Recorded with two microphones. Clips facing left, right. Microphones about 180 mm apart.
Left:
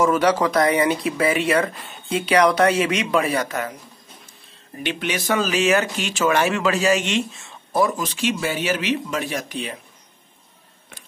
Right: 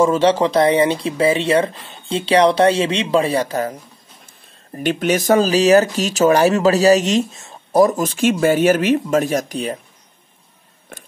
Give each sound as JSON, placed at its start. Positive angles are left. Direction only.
{"t": 0.0, "sound": "speech", "side_deg": -25}
{"t": 4.7, "sound": "speech", "side_deg": -45}